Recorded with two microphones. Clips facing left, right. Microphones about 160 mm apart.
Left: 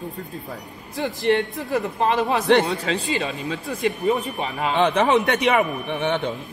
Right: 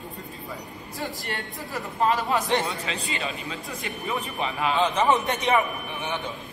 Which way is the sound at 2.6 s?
35° left (ahead or behind).